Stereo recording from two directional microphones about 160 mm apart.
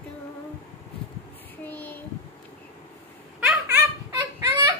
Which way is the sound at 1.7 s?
10° left (ahead or behind).